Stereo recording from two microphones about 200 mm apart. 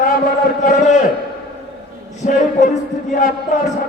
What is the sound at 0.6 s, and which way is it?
Speech, 35° left (ahead or behind).